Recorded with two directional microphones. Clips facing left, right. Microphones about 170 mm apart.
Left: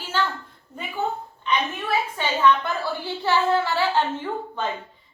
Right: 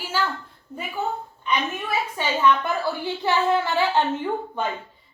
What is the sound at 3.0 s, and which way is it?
A woman's voice, 15° right (ahead or behind).